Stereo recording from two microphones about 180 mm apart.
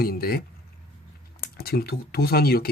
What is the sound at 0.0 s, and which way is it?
Speech, 55° left (ahead or behind).